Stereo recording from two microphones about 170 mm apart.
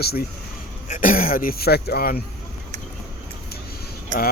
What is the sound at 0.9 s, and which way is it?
Speech, 50° left (ahead or behind).